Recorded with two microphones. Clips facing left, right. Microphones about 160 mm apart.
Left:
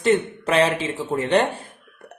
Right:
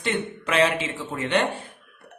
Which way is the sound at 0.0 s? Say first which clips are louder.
Left 8 dB; 40° left (ahead or behind).